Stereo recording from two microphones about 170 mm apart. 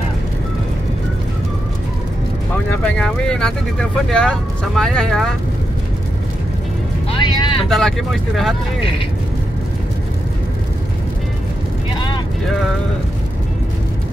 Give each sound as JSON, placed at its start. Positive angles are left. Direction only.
{"t": 2.7, "sound": "speech", "side_deg": 5}
{"t": 7.1, "sound": "vehicle", "side_deg": 30}
{"t": 7.7, "sound": "speech", "side_deg": 0}